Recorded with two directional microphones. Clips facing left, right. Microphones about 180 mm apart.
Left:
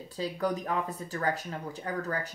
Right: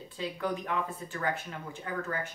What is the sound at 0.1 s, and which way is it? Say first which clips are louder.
Speech: left 3 dB; 40° left (ahead or behind).